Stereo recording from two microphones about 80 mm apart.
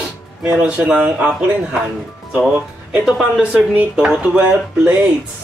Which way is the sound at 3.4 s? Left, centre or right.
Centre.